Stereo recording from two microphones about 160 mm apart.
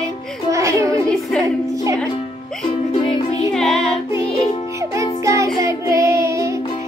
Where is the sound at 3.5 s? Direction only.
Centre (ahead or behind).